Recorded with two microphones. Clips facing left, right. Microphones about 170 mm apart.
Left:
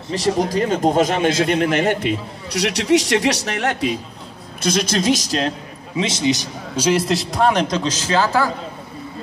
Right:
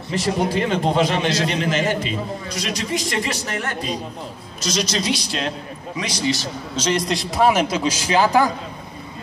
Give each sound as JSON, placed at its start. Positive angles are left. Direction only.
{"t": 0.1, "sound": "a man's voice", "side_deg": 40}
{"t": 4.6, "sound": "a man's voice", "side_deg": 55}
{"t": 5.9, "sound": "a man's voice", "side_deg": 25}
{"t": 6.9, "sound": "a man's voice", "side_deg": 5}